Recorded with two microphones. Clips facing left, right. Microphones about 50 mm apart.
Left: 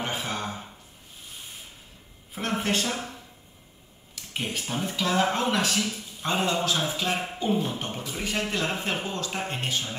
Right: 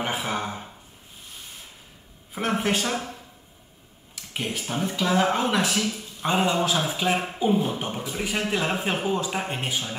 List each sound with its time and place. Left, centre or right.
0.0 s a sound: centre
2.3 s speech: centre
4.1 s speech: centre